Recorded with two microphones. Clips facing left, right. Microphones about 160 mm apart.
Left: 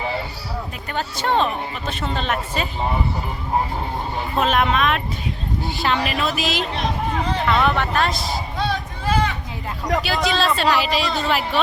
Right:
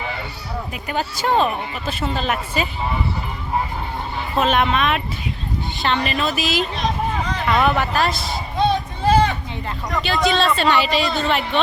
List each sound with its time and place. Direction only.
0.9 s a woman's voice: 10° right (ahead or behind)
4.4 s speech: centre (ahead or behind)
8.5 s a sound: 20° right (ahead or behind)
9.6 s speech: 5° left (ahead or behind)